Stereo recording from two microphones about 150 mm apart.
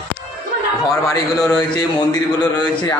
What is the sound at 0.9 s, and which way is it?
Speech, 20° left (ahead or behind).